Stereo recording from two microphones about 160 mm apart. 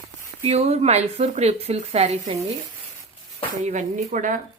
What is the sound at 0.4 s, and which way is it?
Speech, 40° right (ahead or behind).